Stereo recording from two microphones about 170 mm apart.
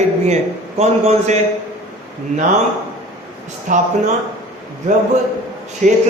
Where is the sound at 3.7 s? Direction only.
50° right (ahead or behind).